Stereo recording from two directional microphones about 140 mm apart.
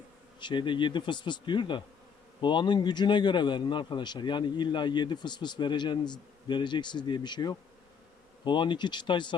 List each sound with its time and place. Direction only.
0.3 s a man's voice: 35° left (ahead or behind)